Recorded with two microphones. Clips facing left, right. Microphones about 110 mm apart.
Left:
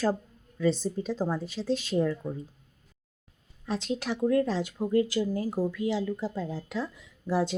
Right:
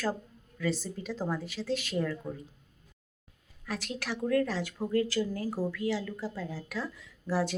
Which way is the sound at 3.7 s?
20° left (ahead or behind).